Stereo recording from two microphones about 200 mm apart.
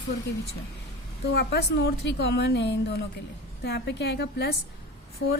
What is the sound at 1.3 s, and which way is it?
A woman's voice, 55° left (ahead or behind).